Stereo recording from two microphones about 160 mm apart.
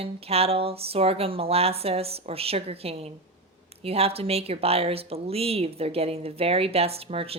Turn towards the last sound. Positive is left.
turn(degrees=-40)  # may be behind; listen again after turning